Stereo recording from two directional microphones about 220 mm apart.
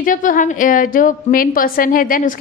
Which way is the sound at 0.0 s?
35° left (ahead or behind).